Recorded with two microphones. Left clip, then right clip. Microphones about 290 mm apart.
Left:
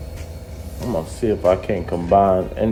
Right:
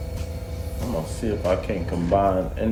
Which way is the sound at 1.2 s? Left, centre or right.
Left.